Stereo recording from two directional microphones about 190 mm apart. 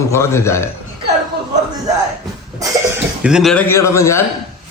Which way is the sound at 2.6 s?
15° right (ahead or behind).